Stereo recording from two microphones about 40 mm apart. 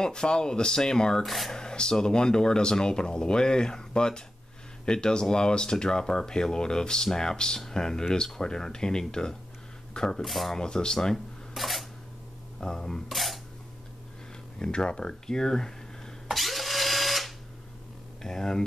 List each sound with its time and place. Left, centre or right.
0.0 s speech: centre
1.2 s speech: centre
1.5 s speech: centre
10.2 s speech: centre
10.5 s speech: centre
11.5 s camera: centre
12.5 s speech: centre
13.1 s single-lens reflex camera: centre
14.6 s speech: left
16.3 s drill: centre
18.2 s speech: centre